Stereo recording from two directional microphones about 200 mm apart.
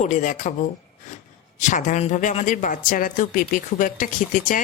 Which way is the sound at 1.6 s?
40° left (ahead or behind).